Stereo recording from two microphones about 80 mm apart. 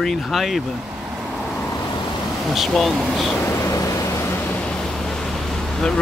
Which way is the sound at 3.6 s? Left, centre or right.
Left.